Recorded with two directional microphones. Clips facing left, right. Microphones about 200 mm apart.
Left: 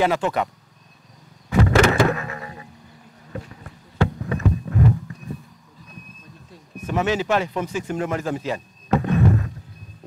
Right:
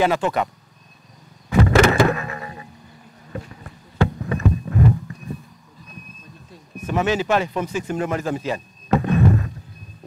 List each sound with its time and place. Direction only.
0.0 s speech: 10° right (ahead or behind)
1.5 s a sound: 15° right (ahead or behind)
3.3 s insect: 15° right (ahead or behind)
4.2 s vehicle: 15° right (ahead or behind)
6.9 s speech: 10° right (ahead or behind)